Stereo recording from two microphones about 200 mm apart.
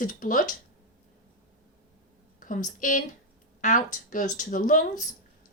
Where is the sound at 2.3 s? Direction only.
40° left (ahead or behind).